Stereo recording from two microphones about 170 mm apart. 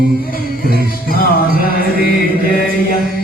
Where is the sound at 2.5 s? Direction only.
60° left (ahead or behind).